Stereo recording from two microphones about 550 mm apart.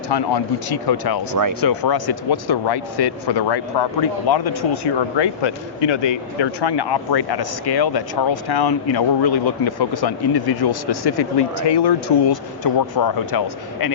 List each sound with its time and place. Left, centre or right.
0.1 s speech: left